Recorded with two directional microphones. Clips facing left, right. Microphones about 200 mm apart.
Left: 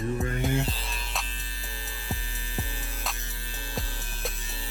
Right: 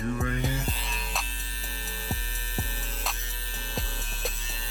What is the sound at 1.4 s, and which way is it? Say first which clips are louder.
Music: even; 15° left (ahead or behind).